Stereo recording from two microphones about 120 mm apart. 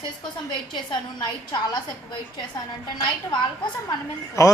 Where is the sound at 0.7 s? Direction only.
40° left (ahead or behind).